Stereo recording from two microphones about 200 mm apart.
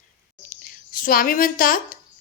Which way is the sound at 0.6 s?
45° left (ahead or behind).